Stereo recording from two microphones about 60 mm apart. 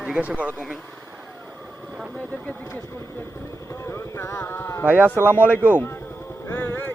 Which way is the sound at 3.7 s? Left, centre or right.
Left.